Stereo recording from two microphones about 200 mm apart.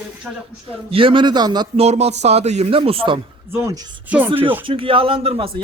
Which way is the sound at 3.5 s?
15° right (ahead or behind).